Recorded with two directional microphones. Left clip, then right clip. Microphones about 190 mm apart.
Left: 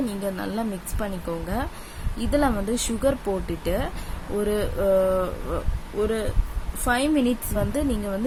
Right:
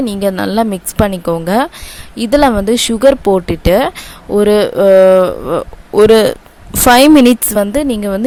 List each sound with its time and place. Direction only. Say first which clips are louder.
0.0 s speech: right 14 dB; 45° right (ahead or behind)